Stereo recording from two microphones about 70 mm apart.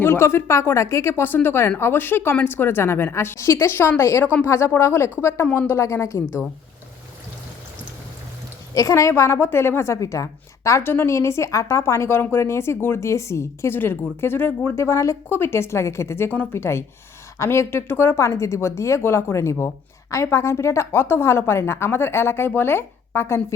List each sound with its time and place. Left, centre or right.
0.0 s a woman's voice: left
8.7 s a woman's voice: left
10.8 s speech: left
14.8 s a woman's voice: left
15.3 s speech: left